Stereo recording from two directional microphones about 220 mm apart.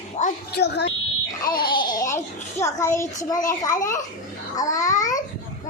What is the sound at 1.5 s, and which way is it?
A child's voice, 20° left (ahead or behind).